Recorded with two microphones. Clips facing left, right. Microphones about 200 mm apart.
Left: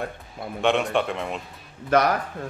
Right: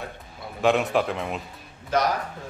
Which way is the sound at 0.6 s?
Centre (ahead or behind).